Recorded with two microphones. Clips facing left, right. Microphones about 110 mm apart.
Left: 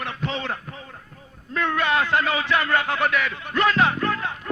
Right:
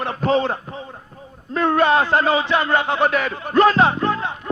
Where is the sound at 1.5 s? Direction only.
35° right (ahead or behind).